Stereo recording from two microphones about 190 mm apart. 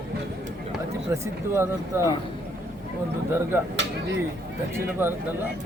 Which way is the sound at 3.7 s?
70° right (ahead or behind).